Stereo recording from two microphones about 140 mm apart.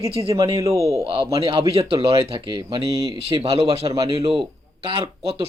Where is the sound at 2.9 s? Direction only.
25° right (ahead or behind).